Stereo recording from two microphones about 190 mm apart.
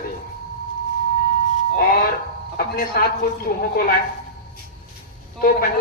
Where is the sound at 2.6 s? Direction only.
50° left (ahead or behind).